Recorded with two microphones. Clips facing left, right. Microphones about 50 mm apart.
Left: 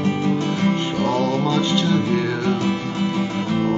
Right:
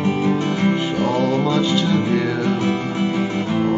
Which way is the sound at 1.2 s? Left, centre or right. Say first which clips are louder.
Right 2 dB; centre.